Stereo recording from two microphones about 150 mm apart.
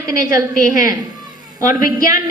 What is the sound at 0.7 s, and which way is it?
A woman's voice, 60° left (ahead or behind).